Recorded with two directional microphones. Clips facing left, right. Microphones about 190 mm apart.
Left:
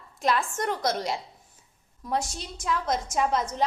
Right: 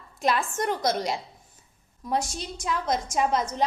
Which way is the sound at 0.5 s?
Centre (ahead or behind).